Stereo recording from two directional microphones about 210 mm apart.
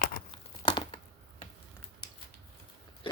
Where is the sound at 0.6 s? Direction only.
25° left (ahead or behind).